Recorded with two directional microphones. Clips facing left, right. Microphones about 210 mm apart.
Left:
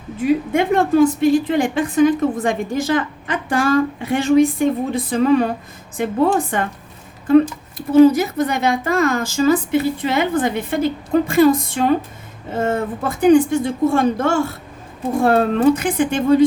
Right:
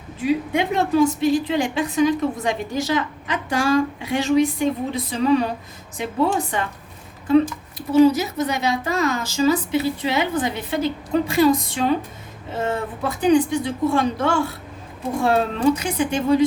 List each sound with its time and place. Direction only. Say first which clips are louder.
0.3 s a woman's voice: left 4 dB; 50° left (ahead or behind)